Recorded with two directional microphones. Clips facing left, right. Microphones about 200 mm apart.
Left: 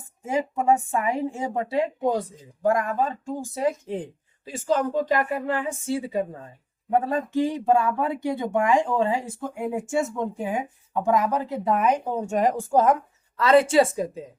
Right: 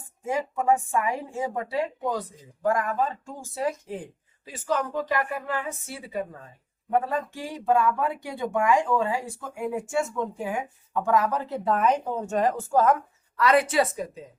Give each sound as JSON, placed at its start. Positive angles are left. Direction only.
{"t": 0.3, "sound": "speech", "side_deg": 25}
{"t": 7.3, "sound": "speech", "side_deg": 20}